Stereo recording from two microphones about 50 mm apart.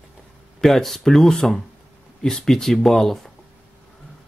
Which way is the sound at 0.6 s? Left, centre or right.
Centre.